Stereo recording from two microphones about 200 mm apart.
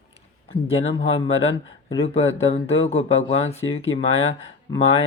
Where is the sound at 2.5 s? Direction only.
30° left (ahead or behind).